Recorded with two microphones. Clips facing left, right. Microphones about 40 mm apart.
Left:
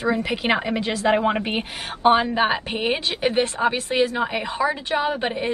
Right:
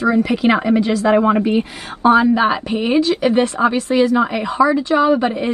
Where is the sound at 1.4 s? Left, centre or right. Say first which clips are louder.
Right 8 dB; left.